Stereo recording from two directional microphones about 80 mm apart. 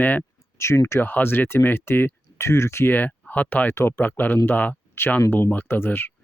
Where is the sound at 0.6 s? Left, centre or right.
Left.